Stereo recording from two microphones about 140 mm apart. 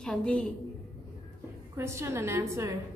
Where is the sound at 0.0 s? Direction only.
5° left (ahead or behind).